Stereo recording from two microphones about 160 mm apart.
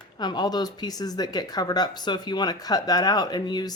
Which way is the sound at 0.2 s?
25° left (ahead or behind).